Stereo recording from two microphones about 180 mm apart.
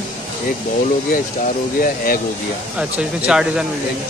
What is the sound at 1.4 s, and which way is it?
Speech, 50° left (ahead or behind).